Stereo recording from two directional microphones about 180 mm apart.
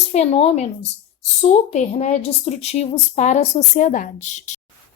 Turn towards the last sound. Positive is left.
turn(degrees=40)  # may be behind; listen again after turning